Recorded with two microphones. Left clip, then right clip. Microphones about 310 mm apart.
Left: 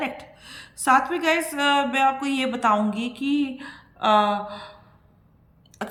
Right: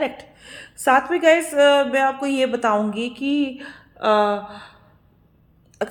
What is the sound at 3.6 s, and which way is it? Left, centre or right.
Speech, left.